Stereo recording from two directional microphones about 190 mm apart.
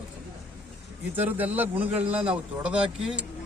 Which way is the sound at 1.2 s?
10° right (ahead or behind).